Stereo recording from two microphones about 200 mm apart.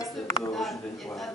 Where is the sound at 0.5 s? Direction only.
Centre (ahead or behind).